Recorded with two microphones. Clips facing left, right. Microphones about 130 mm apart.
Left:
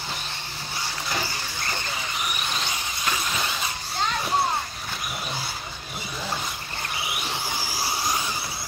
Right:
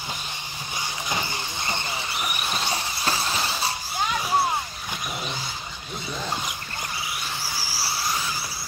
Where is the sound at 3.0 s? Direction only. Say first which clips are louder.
Even; 30° right (ahead or behind).